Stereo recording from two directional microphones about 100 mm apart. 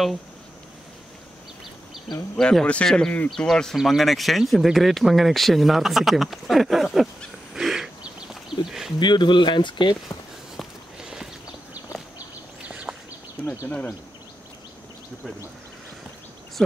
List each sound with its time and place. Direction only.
2.3 s speech: 5° left (ahead or behind)
9.0 s speech: 50° left (ahead or behind)
10.6 s walk: 5° right (ahead or behind)
11.7 s a sound: 15° right (ahead or behind)
13.7 s speech: 10° left (ahead or behind)